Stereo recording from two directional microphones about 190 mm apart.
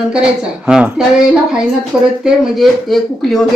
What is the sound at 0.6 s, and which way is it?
Speech, 5° right (ahead or behind).